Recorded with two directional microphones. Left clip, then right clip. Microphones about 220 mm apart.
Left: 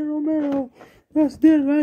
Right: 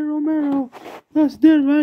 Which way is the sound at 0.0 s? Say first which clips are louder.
Right 2 dB; 40° right (ahead or behind).